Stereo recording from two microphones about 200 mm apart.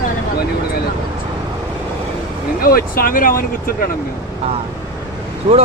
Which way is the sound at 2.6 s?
45° left (ahead or behind).